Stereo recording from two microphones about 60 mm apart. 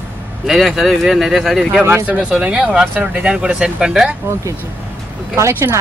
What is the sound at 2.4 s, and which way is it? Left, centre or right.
Speech, centre.